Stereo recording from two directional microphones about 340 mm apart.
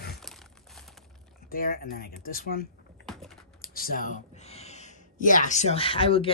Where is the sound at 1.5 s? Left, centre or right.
Left.